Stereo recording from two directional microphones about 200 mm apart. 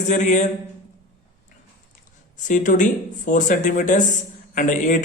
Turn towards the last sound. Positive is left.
turn(degrees=40)  # may be behind; listen again after turning